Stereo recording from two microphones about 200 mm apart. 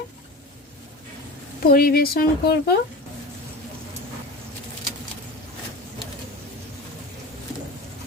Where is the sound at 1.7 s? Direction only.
50° left (ahead or behind).